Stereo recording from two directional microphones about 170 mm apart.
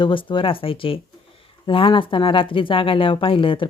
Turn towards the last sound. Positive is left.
turn(degrees=30)  # may be behind; listen again after turning